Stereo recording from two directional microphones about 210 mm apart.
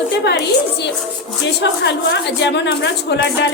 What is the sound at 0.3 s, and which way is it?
A woman's voice, 50° left (ahead or behind).